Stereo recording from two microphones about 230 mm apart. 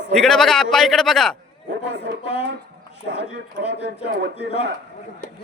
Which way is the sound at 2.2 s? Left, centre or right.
Left.